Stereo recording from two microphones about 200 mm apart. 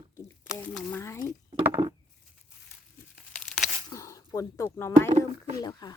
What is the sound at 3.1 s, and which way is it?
Tearing, centre (ahead or behind).